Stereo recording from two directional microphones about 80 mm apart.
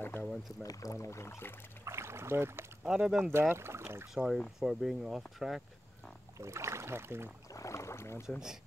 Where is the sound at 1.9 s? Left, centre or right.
Right.